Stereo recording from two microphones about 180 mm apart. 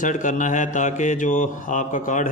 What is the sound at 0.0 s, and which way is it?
Speech, 45° left (ahead or behind).